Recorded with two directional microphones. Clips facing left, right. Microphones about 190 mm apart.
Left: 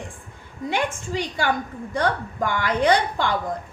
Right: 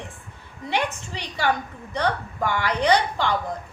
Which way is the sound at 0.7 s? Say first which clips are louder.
Left 1 dB; 50° left (ahead or behind).